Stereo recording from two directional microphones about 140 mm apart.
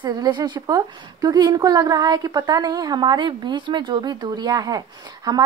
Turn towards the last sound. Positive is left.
turn(degrees=-30)  # may be behind; listen again after turning